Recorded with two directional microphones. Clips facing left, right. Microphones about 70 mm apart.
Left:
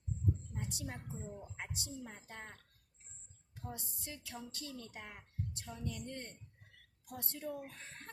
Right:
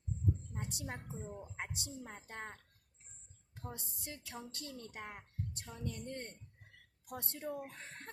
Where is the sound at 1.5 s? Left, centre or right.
Right.